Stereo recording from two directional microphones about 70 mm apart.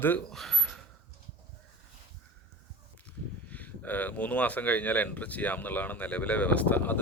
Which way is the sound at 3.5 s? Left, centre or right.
Left.